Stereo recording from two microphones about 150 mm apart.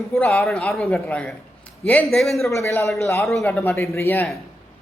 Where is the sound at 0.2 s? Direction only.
5° left (ahead or behind).